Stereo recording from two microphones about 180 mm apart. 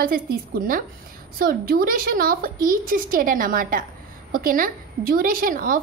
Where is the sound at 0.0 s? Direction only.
55° right (ahead or behind).